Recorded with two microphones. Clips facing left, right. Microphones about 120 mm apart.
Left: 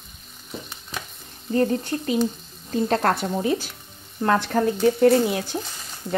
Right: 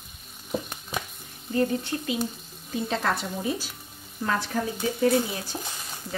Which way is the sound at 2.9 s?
60° left (ahead or behind).